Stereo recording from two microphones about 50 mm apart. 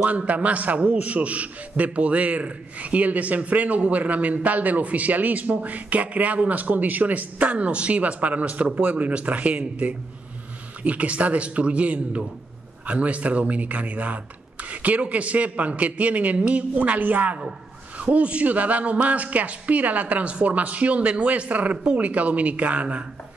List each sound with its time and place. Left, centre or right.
0.0 s a man's voice: right